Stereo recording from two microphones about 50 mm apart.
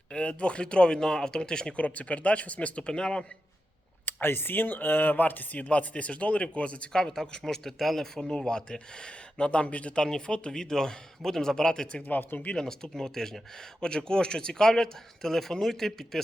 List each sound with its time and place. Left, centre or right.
0.1 s speech: left
1.8 s speech: left
4.0 s speech: left
6.9 s speech: centre
12.0 s speech: left
12.5 s speech: centre